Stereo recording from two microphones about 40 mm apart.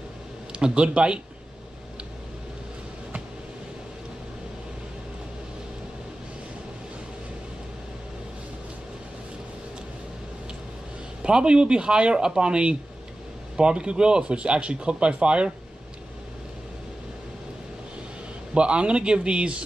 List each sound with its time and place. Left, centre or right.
0.5 s speech: right
11.2 s speech: right
18.5 s speech: right